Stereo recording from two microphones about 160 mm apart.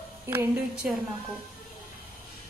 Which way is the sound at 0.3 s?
15° right (ahead or behind).